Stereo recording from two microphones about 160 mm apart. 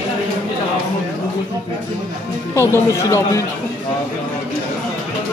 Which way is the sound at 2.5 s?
20° left (ahead or behind).